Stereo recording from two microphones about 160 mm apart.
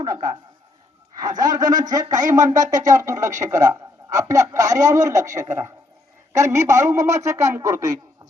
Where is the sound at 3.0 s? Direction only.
20° right (ahead or behind).